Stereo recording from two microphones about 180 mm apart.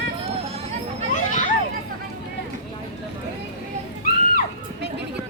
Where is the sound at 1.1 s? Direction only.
45° left (ahead or behind).